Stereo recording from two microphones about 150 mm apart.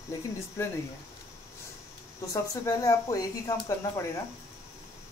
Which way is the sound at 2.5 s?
20° left (ahead or behind).